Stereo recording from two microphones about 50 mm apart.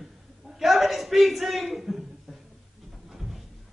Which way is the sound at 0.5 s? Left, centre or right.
Centre.